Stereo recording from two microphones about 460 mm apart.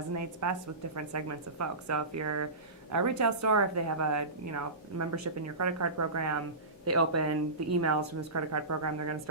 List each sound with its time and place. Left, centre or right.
0.1 s a woman's voice: right